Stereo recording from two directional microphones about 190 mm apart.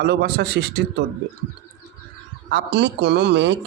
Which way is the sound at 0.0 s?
60° right (ahead or behind).